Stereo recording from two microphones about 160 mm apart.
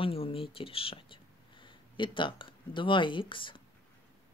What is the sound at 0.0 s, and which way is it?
Speech, 35° left (ahead or behind).